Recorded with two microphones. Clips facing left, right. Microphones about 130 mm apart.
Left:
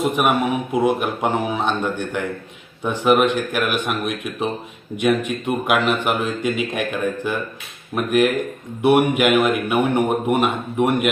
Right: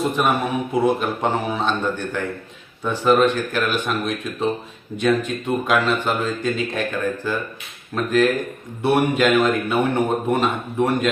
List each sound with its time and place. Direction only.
0.0 s a man's voice: 15° left (ahead or behind)